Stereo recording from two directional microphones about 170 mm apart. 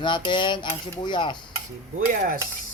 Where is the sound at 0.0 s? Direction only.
25° left (ahead or behind).